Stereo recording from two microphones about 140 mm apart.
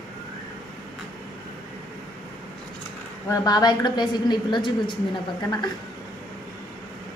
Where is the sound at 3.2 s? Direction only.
25° left (ahead or behind).